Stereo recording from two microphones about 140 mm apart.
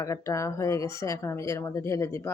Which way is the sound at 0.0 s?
20° left (ahead or behind).